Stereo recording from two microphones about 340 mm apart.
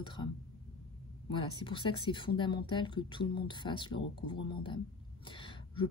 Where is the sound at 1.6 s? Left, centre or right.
Centre.